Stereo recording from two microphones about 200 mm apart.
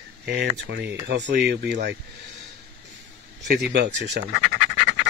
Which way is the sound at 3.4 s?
55° right (ahead or behind).